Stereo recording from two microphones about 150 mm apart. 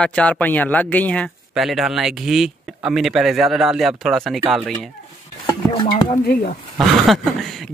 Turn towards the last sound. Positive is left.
turn(degrees=0)  # may be behind; listen again after turning